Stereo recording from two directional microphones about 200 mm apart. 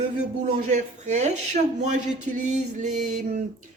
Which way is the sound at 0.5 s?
35° right (ahead or behind).